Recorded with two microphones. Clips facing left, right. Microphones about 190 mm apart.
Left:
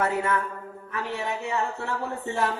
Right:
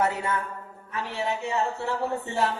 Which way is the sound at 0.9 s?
25° right (ahead or behind).